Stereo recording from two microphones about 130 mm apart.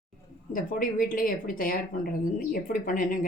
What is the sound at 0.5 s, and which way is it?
Speech, 90° left.